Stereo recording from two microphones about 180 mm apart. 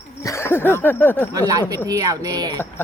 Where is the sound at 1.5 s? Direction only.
20° right (ahead or behind).